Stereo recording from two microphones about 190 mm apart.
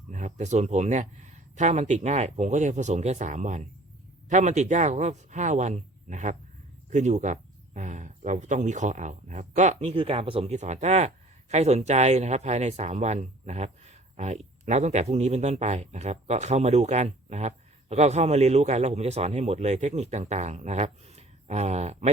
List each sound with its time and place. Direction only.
0.1 s speech: 40° right (ahead or behind)